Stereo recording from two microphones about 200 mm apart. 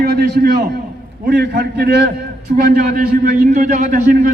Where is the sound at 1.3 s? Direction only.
45° right (ahead or behind).